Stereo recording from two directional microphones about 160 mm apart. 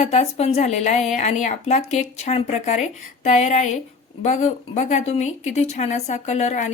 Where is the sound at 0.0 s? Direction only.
45° left (ahead or behind).